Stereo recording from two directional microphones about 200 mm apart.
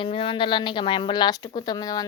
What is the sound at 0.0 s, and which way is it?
Speech, 25° left (ahead or behind).